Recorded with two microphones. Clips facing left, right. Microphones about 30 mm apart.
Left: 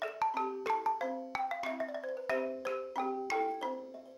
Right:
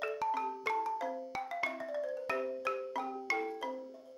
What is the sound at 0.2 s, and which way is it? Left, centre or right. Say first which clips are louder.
Marimba: left 4 dB; centre.